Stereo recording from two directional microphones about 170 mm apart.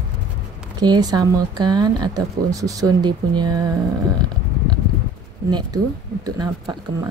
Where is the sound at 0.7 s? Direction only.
25° right (ahead or behind).